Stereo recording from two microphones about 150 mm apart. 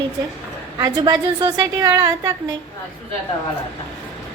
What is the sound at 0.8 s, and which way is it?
A woman's voice, 25° right (ahead or behind).